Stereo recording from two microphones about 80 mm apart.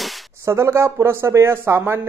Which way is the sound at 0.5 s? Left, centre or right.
Right.